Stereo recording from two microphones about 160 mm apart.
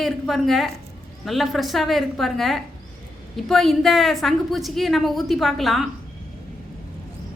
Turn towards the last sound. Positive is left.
turn(degrees=0)  # may be behind; listen again after turning